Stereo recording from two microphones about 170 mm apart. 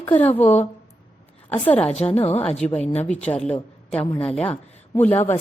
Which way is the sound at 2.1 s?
35° left (ahead or behind).